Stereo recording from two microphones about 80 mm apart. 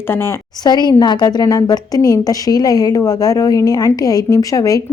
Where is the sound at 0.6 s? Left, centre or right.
Left.